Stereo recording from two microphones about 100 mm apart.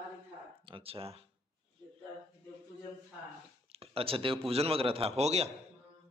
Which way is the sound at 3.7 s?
75° right (ahead or behind).